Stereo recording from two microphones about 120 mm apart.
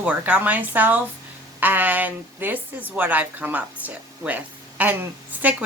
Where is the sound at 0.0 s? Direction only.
10° right (ahead or behind).